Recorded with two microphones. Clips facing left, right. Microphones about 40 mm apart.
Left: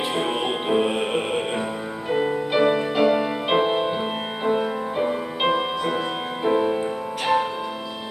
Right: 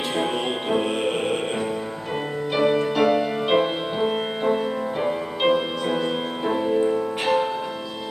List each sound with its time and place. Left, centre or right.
0.2 s music: centre